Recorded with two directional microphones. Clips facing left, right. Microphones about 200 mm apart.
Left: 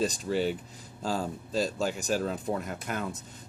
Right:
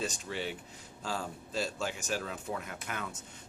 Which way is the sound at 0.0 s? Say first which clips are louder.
Left 9 dB; 35° left (ahead or behind).